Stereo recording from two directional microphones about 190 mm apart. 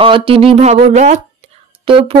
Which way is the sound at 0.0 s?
30° right (ahead or behind).